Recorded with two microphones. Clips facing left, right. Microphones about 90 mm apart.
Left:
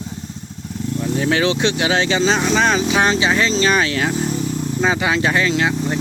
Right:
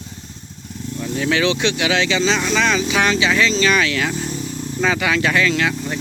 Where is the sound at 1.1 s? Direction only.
35° left (ahead or behind).